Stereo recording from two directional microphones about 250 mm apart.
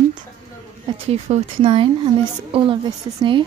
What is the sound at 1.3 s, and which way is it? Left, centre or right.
A woman's voice, right.